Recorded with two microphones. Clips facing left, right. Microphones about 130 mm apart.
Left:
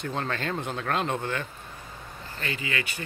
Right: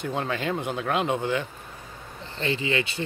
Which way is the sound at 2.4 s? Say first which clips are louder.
Right 6 dB; 25° right (ahead or behind).